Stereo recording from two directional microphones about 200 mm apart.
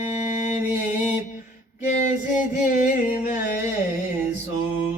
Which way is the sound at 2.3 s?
40° left (ahead or behind).